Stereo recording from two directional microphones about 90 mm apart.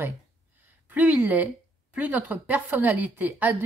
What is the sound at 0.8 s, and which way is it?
A woman's voice, 20° right (ahead or behind).